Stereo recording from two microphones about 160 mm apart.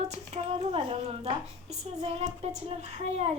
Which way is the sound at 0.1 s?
40° right (ahead or behind).